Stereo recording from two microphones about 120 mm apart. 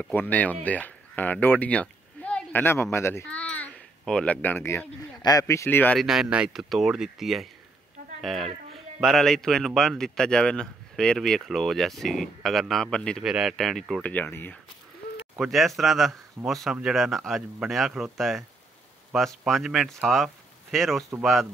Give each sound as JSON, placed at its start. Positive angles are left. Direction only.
{"t": 0.0, "sound": "speech", "side_deg": 15}
{"t": 3.3, "sound": "babbling", "side_deg": 10}
{"t": 5.2, "sound": "speech", "side_deg": 30}
{"t": 5.9, "sound": "speech", "side_deg": -5}
{"t": 13.2, "sound": "speech", "side_deg": -5}
{"t": 14.0, "sound": "speech", "side_deg": 15}
{"t": 15.3, "sound": "speech", "side_deg": 0}